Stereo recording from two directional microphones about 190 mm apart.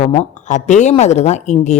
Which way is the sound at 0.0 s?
35° left (ahead or behind).